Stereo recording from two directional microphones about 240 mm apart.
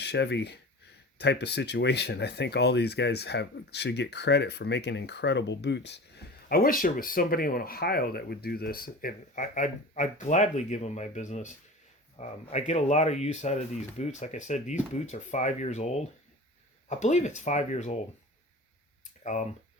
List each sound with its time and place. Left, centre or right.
0.0 s speech: left
19.2 s speech: left